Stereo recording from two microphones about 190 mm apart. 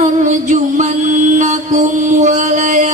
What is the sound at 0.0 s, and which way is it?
Music, 40° right (ahead or behind).